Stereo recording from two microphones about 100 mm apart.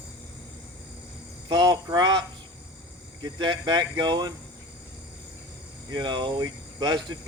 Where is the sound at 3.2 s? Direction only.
45° right (ahead or behind).